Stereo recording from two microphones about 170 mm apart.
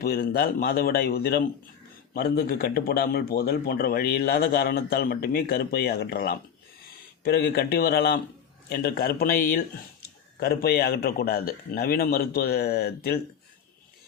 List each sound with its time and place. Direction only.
0.0 s a man's voice: 60° left (ahead or behind)